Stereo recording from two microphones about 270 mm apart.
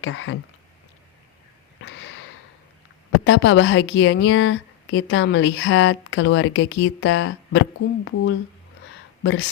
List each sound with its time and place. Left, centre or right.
0.0 s a woman's voice: left
1.8 s a sound: left
3.2 s a woman's voice: left